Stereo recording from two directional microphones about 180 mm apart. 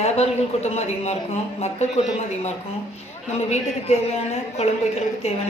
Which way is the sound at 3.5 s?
35° left (ahead or behind).